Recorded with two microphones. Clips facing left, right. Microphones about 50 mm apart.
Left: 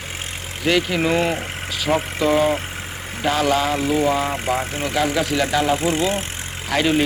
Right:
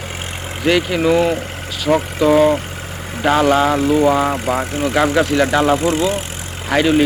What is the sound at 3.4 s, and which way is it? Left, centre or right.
Speech, right.